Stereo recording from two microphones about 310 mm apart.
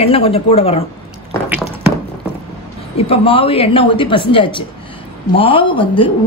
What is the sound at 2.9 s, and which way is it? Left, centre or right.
A woman's voice, centre.